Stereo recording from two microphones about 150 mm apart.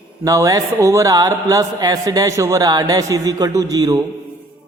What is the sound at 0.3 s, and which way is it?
A man's voice, 20° right (ahead or behind).